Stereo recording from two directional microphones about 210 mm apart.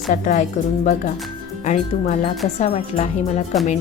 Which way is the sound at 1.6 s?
35° left (ahead or behind).